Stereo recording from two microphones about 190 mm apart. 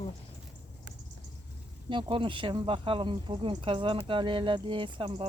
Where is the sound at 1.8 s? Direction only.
25° right (ahead or behind).